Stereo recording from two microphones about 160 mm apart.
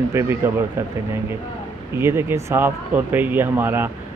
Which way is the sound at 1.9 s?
15° right (ahead or behind).